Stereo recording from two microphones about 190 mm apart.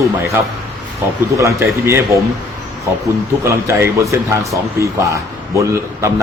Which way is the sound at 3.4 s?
15° right (ahead or behind).